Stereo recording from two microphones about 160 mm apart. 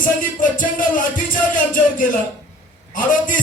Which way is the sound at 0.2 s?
55° left (ahead or behind).